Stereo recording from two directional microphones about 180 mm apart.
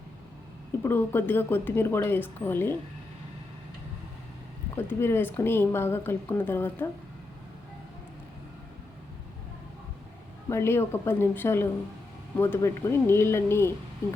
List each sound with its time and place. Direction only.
0.8 s a woman's voice: 10° left (ahead or behind)
4.9 s a woman's voice: 15° left (ahead or behind)
10.5 s a woman's voice: 15° left (ahead or behind)